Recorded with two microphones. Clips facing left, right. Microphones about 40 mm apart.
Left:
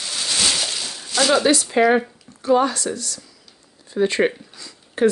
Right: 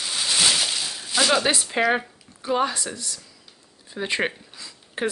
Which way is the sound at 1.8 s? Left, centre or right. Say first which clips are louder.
Left 5 dB; centre.